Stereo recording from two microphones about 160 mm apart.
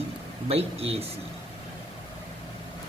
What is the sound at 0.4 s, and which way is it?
Speech, 40° right (ahead or behind).